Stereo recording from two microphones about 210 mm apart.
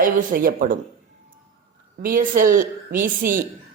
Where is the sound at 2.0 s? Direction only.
40° right (ahead or behind).